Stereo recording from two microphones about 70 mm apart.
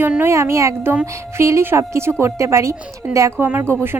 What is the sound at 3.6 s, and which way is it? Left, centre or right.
Speech, right.